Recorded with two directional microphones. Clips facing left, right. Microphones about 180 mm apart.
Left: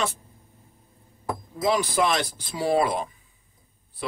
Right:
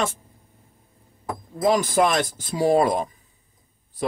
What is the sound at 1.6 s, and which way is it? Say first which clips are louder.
Speech: right 4 dB; 45° right (ahead or behind).